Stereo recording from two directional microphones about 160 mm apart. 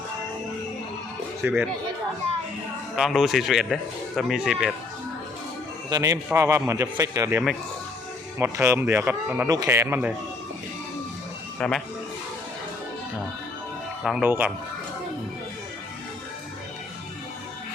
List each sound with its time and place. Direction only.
1.4 s a man's voice: 15° right (ahead or behind)
2.9 s a man's voice: centre (ahead or behind)
5.9 s a man's voice: 20° right (ahead or behind)
11.6 s a man's voice: 5° left (ahead or behind)
14.0 s speech: centre (ahead or behind)
14.3 s a man's voice: 10° right (ahead or behind)